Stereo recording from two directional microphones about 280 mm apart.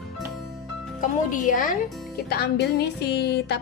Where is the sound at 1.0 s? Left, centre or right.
Left.